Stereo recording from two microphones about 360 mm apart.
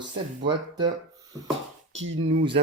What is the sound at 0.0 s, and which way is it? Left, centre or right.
Speech, centre.